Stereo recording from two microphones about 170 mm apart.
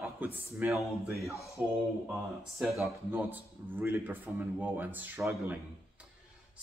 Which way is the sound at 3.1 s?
10° right (ahead or behind).